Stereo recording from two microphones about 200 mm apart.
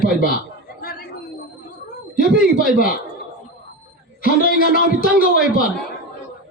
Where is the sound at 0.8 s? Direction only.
50° left (ahead or behind).